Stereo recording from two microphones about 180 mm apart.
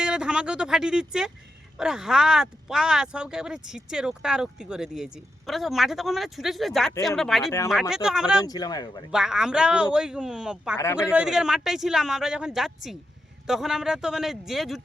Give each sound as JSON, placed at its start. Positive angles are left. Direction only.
{"t": 0.0, "sound": "speech", "side_deg": -5}
{"t": 8.4, "sound": "speech", "side_deg": 20}
{"t": 9.1, "sound": "speech", "side_deg": -5}